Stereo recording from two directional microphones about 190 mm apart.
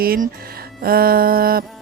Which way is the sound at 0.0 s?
50° right (ahead or behind).